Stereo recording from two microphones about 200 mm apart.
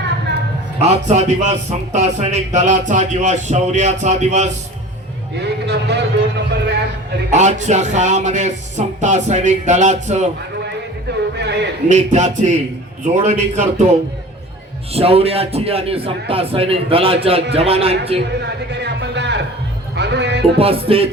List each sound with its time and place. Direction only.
0.8 s speech: 35° right (ahead or behind)
5.4 s a man's voice: 60° right (ahead or behind)
7.3 s speech: 35° right (ahead or behind)
11.3 s a man's voice: 60° right (ahead or behind)
11.9 s speech: 35° right (ahead or behind)
14.9 s speech: 30° right (ahead or behind)
18.7 s a man's voice: 60° right (ahead or behind)
20.6 s speech: 30° right (ahead or behind)